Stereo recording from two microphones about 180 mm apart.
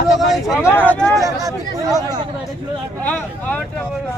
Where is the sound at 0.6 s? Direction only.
10° left (ahead or behind).